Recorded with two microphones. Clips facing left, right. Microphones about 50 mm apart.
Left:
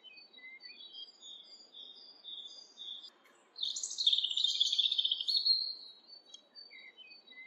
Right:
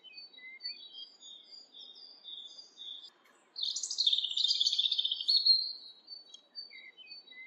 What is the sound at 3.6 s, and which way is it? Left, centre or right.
Chirp, left.